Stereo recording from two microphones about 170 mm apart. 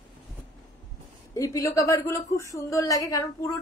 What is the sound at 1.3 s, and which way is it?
A woman's voice, 20° left (ahead or behind).